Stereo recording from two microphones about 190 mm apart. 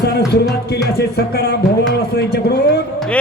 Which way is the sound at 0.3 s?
60° left (ahead or behind).